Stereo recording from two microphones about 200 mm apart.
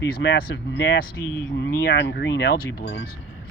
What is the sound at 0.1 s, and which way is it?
Speech, 55° left (ahead or behind).